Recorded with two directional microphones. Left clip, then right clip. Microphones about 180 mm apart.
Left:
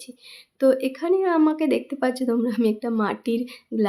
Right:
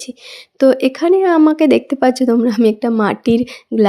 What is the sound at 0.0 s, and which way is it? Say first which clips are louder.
Speech: right 12 dB; 40° right (ahead or behind).